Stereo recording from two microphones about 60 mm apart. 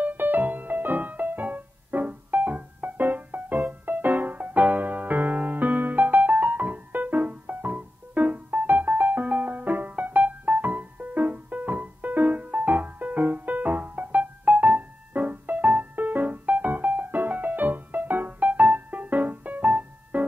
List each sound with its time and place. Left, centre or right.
0.0 s music: right